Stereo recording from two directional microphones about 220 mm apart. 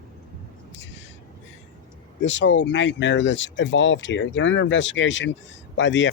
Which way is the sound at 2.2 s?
55° left (ahead or behind).